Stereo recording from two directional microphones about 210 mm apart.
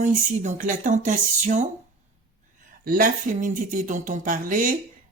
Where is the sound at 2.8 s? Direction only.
40° right (ahead or behind).